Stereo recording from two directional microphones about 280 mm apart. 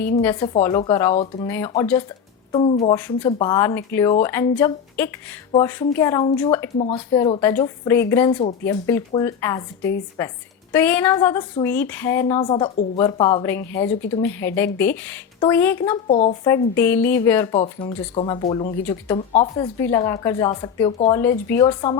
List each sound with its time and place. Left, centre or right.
0.2 s a woman's voice: centre
1.5 s a woman's voice: centre
2.9 s speech: centre
6.7 s speech: left
16.0 s a woman's voice: left
16.5 s speech: centre